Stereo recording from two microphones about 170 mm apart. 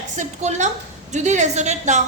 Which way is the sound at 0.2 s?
45° right (ahead or behind).